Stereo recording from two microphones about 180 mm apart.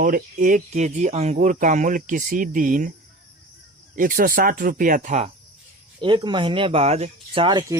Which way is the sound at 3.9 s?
50° right (ahead or behind).